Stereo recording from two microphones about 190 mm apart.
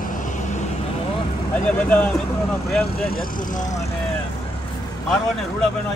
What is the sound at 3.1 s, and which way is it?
Speech, 45° left (ahead or behind).